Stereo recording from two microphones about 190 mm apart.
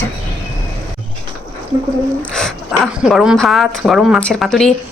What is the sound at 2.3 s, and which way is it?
Speech, 5° left (ahead or behind).